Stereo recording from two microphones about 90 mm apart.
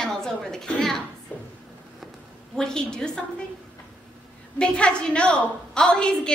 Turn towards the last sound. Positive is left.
turn(degrees=10)  # may be behind; listen again after turning